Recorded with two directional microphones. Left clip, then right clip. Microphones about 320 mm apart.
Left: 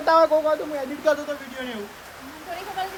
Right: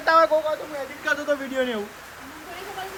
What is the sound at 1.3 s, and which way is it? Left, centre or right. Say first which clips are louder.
Speech: right 7 dB; centre.